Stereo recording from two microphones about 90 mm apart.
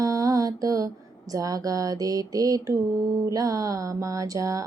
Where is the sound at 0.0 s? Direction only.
40° right (ahead or behind).